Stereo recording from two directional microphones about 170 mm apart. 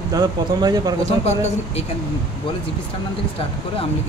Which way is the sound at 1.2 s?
40° left (ahead or behind).